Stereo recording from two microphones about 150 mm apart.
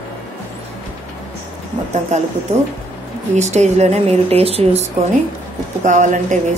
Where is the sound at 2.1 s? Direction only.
50° right (ahead or behind).